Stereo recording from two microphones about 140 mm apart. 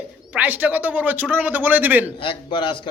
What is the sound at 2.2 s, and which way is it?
Speech, 35° left (ahead or behind).